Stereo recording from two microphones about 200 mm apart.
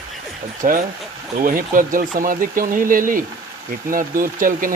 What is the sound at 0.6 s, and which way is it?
A man's voice, 40° right (ahead or behind).